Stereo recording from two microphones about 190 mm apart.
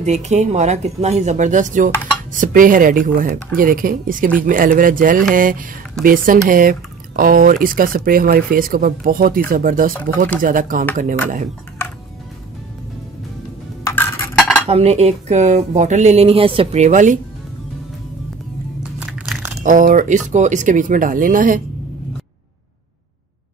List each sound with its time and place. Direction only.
0.0 s speech: 35° right (ahead or behind)
13.8 s a sound: 10° left (ahead or behind)
14.7 s speech: 35° right (ahead or behind)
18.9 s crumpling: 5° right (ahead or behind)
19.6 s speech: 45° right (ahead or behind)